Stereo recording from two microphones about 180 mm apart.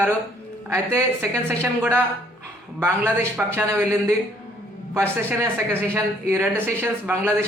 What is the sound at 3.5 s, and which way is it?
A woman's voice, 15° right (ahead or behind).